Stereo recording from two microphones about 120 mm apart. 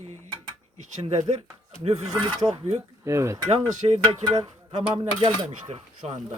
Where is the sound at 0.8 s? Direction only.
70° right (ahead or behind).